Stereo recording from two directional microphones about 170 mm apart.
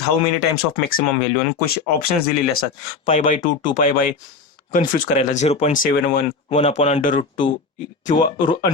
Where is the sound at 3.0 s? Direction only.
45° left (ahead or behind).